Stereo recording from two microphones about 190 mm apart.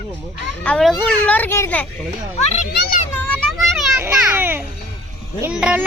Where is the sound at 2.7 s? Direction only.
60° left (ahead or behind).